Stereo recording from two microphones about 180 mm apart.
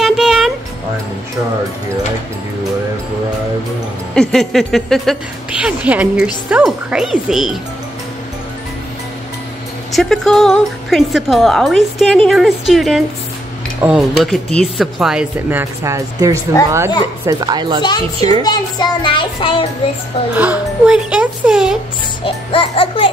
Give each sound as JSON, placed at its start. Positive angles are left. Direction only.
{"t": 0.0, "sound": "music", "side_deg": 0}
{"t": 4.1, "sound": "speech", "side_deg": 5}
{"t": 9.9, "sound": "speech", "side_deg": 0}
{"t": 15.6, "sound": "speech", "side_deg": -15}
{"t": 17.8, "sound": "child singing", "side_deg": 20}
{"t": 20.3, "sound": "speech", "side_deg": -5}
{"t": 22.2, "sound": "music", "side_deg": 30}